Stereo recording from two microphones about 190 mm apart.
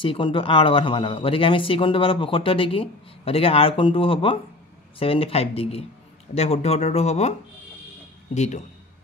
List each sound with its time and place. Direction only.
0.0 s speech: 25° left (ahead or behind)
8.4 s speech: 40° left (ahead or behind)